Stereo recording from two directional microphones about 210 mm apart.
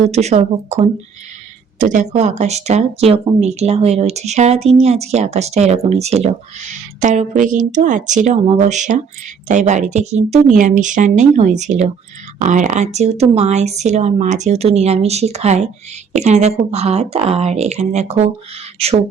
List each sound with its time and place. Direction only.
0.0 s speech: 30° right (ahead or behind)